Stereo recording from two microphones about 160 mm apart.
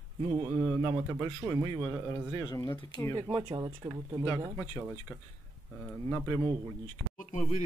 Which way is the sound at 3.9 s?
25° right (ahead or behind).